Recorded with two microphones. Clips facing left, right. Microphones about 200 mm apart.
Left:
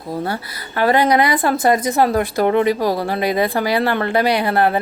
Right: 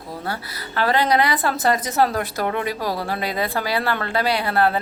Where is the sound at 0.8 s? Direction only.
15° left (ahead or behind).